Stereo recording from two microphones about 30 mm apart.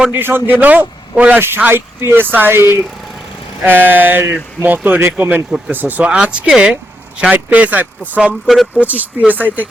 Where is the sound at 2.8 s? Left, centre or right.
Centre.